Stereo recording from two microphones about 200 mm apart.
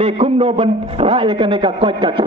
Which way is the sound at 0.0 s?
30° right (ahead or behind).